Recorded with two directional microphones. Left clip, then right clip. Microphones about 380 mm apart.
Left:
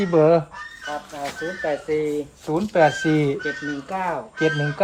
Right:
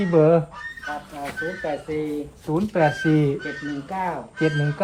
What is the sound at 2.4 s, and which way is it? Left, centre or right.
Speech, centre.